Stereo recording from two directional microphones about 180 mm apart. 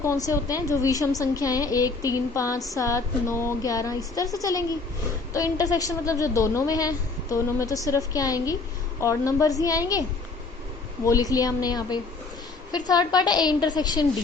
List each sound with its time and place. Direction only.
0.0 s a woman's voice: 15° left (ahead or behind)
11.0 s a woman's voice: 20° left (ahead or behind)